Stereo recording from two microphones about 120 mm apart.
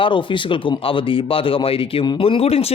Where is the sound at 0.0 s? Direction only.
45° left (ahead or behind).